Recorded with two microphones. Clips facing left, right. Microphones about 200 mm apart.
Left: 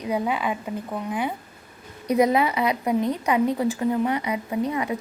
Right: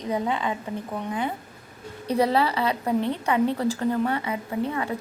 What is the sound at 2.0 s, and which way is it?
A woman's voice, 15° left (ahead or behind).